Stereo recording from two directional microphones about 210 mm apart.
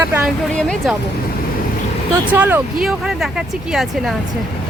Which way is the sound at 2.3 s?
10° right (ahead or behind).